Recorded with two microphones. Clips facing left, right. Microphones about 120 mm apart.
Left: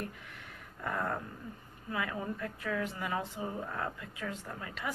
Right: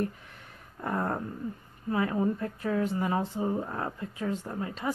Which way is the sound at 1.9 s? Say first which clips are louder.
Right 9 dB; 35° right (ahead or behind).